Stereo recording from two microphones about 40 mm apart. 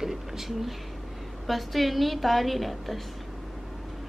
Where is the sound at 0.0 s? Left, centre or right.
Centre.